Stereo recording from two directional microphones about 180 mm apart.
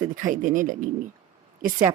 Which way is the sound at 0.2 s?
45° right (ahead or behind).